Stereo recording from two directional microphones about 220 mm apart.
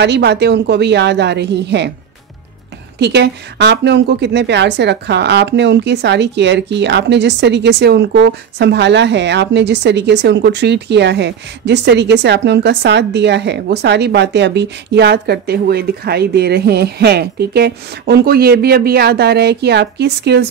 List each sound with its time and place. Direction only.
0.0 s a woman's voice: 50° right (ahead or behind)
3.0 s a woman's voice: 50° right (ahead or behind)